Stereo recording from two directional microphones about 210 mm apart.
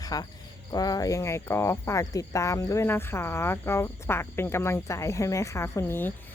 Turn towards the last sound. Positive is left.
turn(degrees=10)  # may be behind; listen again after turning